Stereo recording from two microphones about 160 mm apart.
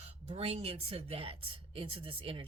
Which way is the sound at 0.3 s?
40° right (ahead or behind).